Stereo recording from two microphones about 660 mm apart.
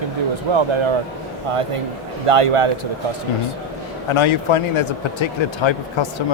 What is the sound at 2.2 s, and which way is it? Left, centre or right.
Speech, right.